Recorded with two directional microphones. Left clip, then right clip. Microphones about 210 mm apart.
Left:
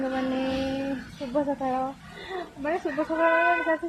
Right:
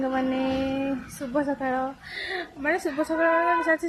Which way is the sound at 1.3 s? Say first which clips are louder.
Even; 20° right (ahead or behind).